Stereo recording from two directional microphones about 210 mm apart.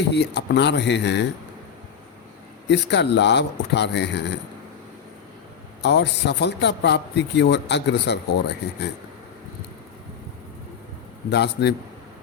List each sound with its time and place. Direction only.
0.1 s speech: 55° left (ahead or behind)
2.6 s speech: 55° left (ahead or behind)
5.8 s speech: 55° left (ahead or behind)
11.3 s a man's voice: 55° left (ahead or behind)